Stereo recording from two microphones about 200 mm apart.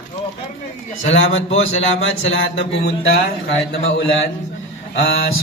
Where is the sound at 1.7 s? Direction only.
70° left (ahead or behind).